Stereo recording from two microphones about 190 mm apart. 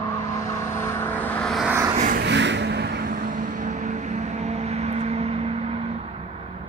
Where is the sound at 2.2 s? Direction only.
65° right (ahead or behind); by 5.8 s 35° right (ahead or behind).